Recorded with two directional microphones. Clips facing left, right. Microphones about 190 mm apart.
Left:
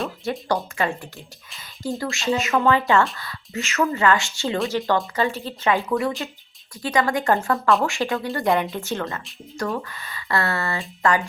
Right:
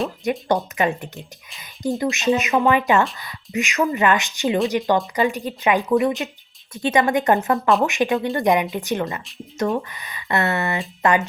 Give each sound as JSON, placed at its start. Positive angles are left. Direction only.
{"t": 0.3, "sound": "speech", "side_deg": -20}